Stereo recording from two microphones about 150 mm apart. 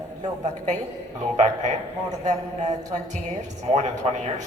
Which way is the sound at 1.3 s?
50° right (ahead or behind).